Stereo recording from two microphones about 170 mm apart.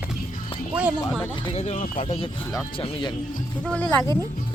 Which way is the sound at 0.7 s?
5° right (ahead or behind).